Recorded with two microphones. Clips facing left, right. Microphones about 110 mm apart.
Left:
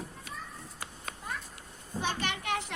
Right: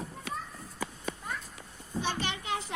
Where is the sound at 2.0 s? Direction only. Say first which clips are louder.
Left 1 dB; 55° left (ahead or behind).